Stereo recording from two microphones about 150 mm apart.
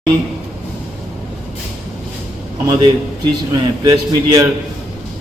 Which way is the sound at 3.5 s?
20° right (ahead or behind).